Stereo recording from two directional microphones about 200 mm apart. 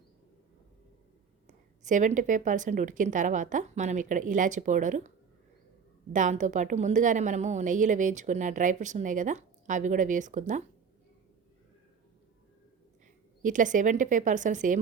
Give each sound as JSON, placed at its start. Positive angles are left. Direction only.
{"t": 1.5, "sound": "a woman's voice", "side_deg": -40}
{"t": 6.1, "sound": "a woman's voice", "side_deg": -40}
{"t": 13.4, "sound": "a woman's voice", "side_deg": -40}